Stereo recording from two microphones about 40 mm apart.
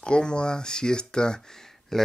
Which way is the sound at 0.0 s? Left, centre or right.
Left.